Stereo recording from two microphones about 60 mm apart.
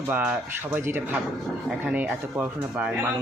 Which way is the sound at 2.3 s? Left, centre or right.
Right.